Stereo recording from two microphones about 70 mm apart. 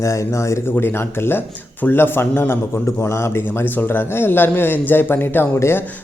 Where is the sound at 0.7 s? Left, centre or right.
Left.